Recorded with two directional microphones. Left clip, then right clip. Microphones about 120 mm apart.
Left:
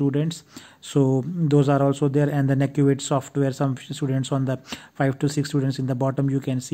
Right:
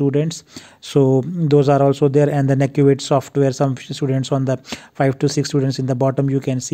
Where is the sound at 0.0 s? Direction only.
35° right (ahead or behind).